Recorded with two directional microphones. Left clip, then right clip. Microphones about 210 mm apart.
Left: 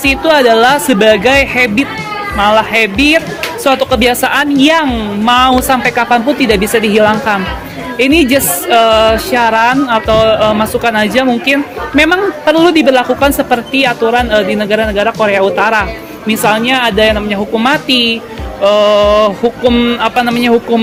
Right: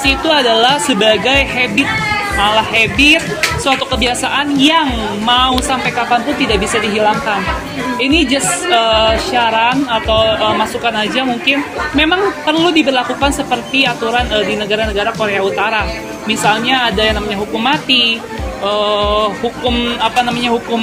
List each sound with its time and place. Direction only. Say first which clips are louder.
0.0 s speech: left 4 dB; 50° left (ahead or behind)